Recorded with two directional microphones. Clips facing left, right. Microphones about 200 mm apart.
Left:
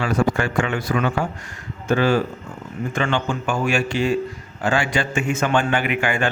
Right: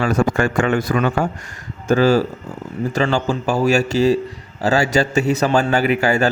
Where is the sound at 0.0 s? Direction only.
45° right (ahead or behind).